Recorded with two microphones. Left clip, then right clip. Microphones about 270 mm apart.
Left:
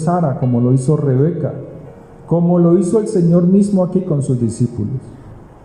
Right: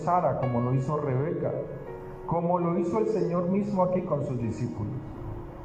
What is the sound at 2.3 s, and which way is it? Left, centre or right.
A man's voice, left.